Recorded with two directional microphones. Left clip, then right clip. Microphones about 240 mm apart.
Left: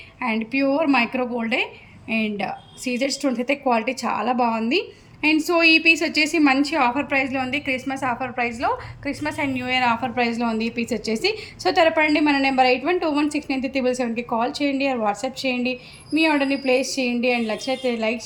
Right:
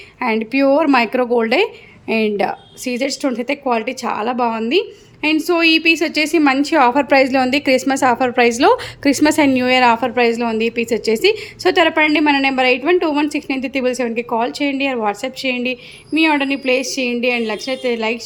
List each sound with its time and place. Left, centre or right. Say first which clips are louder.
0.2 s a woman's voice: right 6 dB; centre
9.1 s a woman's voice: right 11 dB; right; by 18.2 s centre